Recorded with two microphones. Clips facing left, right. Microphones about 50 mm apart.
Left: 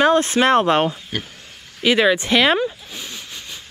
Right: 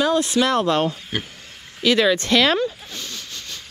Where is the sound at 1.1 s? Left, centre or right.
Centre.